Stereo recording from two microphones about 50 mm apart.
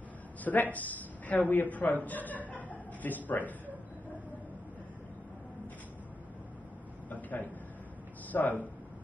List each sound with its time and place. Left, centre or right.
0.4 s a woman's voice: left
7.1 s a sound: left
8.3 s a man's voice: left